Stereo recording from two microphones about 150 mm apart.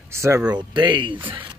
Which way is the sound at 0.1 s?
20° right (ahead or behind).